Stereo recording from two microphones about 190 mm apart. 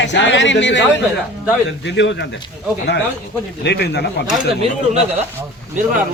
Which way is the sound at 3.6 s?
60° left (ahead or behind).